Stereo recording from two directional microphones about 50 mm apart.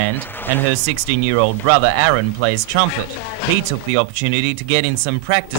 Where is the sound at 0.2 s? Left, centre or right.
Left.